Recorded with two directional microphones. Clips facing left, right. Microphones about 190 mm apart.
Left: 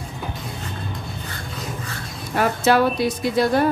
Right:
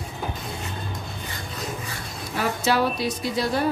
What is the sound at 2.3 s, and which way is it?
A woman's voice, 55° left (ahead or behind).